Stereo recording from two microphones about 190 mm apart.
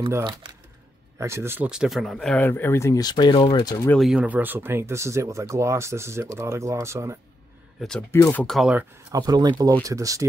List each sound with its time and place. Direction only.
0.1 s speech: 25° right (ahead or behind); by 3.9 s 20° left (ahead or behind)
3.9 s speech: centre (ahead or behind)
8.1 s speech: 10° left (ahead or behind)
9.1 s speech: 20° right (ahead or behind)